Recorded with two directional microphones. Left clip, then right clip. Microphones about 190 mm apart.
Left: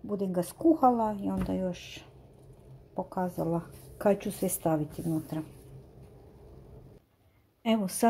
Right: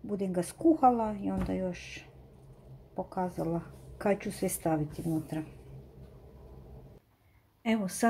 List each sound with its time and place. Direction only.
0.0 s speech: 5° left (ahead or behind)
7.6 s speech: 20° left (ahead or behind)